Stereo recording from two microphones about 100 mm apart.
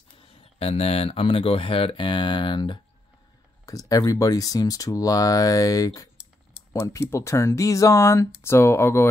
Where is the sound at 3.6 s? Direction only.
35° left (ahead or behind).